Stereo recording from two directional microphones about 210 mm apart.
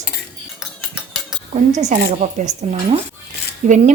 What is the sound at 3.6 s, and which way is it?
Speech, 35° right (ahead or behind).